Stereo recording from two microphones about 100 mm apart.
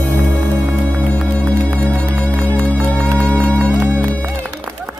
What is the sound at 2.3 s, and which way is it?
Music, 20° right (ahead or behind).